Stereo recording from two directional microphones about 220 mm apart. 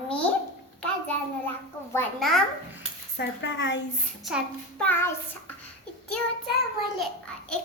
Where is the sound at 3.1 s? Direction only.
55° left (ahead or behind).